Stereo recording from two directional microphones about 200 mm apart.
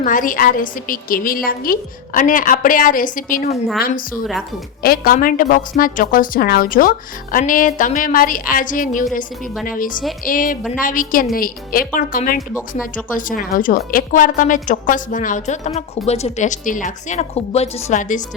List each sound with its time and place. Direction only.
0.0 s a woman's voice: 40° left (ahead or behind)
3.5 s a woman's voice: centre (ahead or behind)
3.8 s a woman's voice: 45° left (ahead or behind)